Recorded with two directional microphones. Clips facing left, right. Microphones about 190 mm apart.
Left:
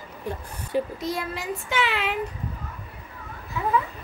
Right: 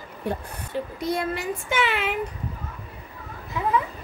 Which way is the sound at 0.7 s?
15° left (ahead or behind).